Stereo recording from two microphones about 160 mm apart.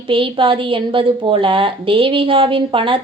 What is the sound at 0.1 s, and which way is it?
A woman's voice, 35° right (ahead or behind).